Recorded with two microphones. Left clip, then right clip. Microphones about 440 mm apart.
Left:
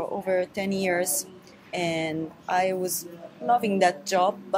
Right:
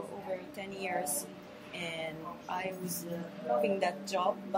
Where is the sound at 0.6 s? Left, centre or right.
Left.